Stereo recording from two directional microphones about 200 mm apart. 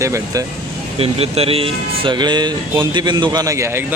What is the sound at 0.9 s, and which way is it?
Speech, 30° right (ahead or behind).